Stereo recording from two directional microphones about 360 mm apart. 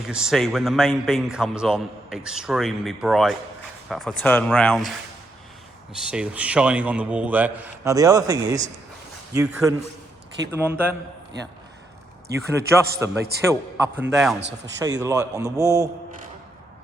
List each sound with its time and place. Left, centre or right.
0.0 s a man's voice: centre
5.9 s a man's voice: centre
12.9 s a man's voice: right
13.4 s a man's voice: centre